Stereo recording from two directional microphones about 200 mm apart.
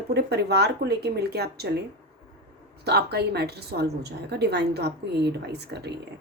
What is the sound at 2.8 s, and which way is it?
A woman's voice, 55° right (ahead or behind).